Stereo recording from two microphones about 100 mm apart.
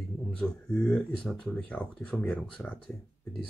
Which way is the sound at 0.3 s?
10° left (ahead or behind).